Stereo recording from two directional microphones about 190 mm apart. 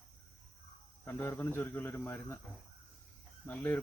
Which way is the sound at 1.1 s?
10° left (ahead or behind).